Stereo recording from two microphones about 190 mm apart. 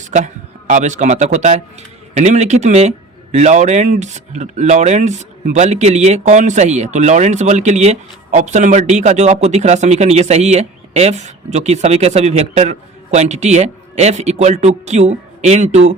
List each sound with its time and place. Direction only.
0.0 s a man's voice: 40° right (ahead or behind)